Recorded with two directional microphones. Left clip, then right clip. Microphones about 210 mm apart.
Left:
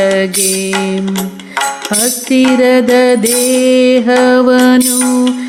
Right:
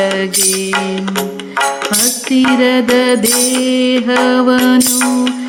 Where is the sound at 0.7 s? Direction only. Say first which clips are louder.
Even; 25° right (ahead or behind).